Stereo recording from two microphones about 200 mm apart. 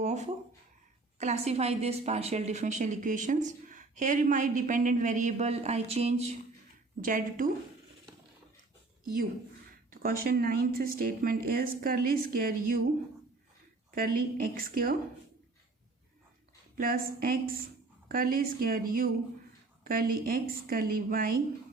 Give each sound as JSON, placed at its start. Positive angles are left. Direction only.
{"t": 0.0, "sound": "a sound", "side_deg": -35}
{"t": 1.2, "sound": "a woman's voice", "side_deg": -35}
{"t": 7.0, "sound": "a woman's voice", "side_deg": -45}
{"t": 9.9, "sound": "a woman's voice", "side_deg": -45}
{"t": 13.9, "sound": "a woman's voice", "side_deg": -45}
{"t": 16.7, "sound": "a woman's voice", "side_deg": -45}